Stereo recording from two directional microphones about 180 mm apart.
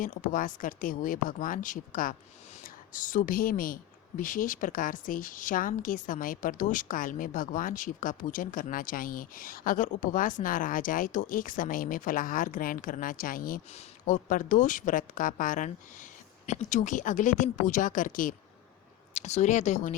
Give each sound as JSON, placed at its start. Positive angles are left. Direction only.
{"t": 0.0, "sound": "a woman's voice", "side_deg": 50}